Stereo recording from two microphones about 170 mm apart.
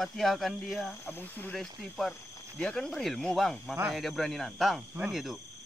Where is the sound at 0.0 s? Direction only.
Centre (ahead or behind).